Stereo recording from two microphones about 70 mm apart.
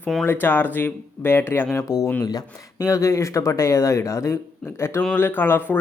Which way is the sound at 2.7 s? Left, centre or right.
Left.